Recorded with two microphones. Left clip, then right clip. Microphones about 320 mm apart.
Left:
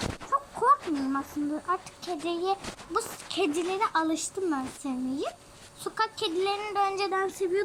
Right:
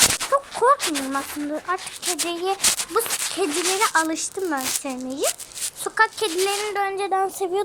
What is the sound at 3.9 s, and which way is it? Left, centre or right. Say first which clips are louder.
Speech: right 6 dB; centre.